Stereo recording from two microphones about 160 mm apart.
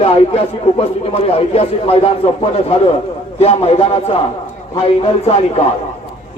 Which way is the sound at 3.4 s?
40° left (ahead or behind).